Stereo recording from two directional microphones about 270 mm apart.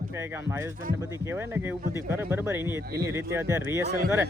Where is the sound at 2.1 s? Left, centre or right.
Centre.